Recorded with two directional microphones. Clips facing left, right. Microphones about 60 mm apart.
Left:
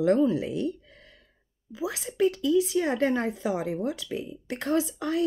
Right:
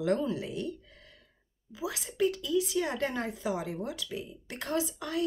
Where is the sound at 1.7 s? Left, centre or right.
Left.